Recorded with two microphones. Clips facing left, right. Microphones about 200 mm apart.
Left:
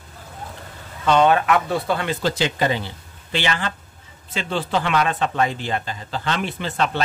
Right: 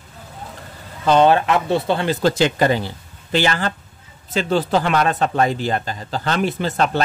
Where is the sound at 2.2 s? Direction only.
50° right (ahead or behind).